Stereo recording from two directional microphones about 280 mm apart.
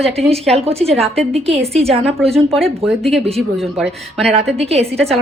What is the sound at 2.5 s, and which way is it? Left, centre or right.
Speech, right.